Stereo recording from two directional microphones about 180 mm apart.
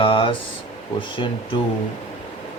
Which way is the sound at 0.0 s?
30° left (ahead or behind).